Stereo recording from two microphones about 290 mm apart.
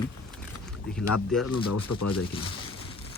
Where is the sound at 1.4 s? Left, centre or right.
Left.